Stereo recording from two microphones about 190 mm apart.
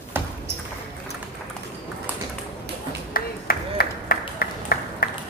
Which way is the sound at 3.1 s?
50° left (ahead or behind).